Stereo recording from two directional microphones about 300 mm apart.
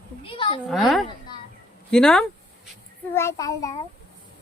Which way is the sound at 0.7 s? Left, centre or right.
Centre.